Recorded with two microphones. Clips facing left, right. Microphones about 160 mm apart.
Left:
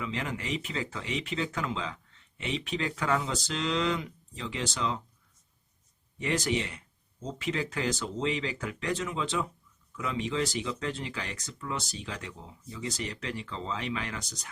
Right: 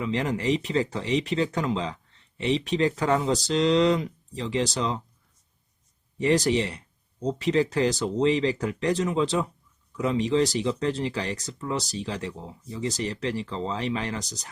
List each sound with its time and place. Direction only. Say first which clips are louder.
0.0 s speech: right 9 dB; 35° right (ahead or behind)
6.1 s speech: right 8 dB; 35° right (ahead or behind)